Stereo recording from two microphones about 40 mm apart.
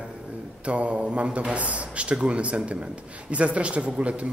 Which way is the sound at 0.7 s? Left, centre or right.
Right.